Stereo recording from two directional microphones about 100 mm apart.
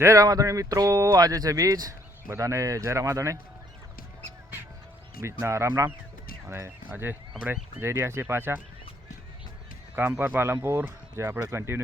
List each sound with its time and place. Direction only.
0.0 s speech: 35° right (ahead or behind)
5.2 s speech: 30° right (ahead or behind)
9.9 s speech: 20° right (ahead or behind)